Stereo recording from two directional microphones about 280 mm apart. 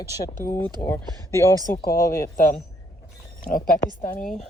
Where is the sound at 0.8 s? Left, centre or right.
Centre.